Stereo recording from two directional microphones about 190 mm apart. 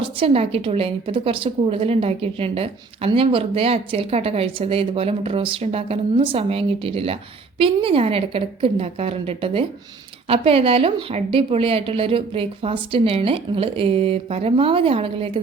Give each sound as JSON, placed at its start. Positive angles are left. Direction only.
{"t": 0.0, "sound": "a woman's voice", "side_deg": -30}